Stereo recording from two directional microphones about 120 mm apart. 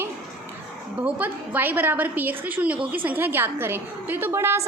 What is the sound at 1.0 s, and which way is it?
A woman's voice, 15° right (ahead or behind).